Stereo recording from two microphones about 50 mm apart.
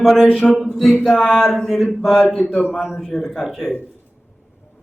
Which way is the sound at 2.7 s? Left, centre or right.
Centre.